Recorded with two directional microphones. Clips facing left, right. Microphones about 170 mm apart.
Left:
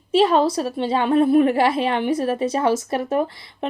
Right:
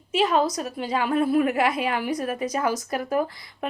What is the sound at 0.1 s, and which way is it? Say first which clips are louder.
A woman's voice: left 5 dB; 30° left (ahead or behind).